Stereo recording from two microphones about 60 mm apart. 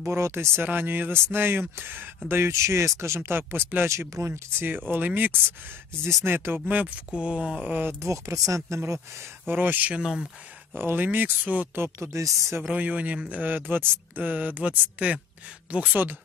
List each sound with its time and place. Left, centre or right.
0.0 s speech: right
0.7 s speech: right
2.5 s speech: right
3.0 s speech: right
4.1 s speech: right
4.6 s speech: right
6.0 s speech: right
7.1 s speech: centre
7.6 s speech: right
8.0 s speech: right
9.5 s speech: right
10.7 s speech: right
11.7 s speech: right
12.6 s speech: right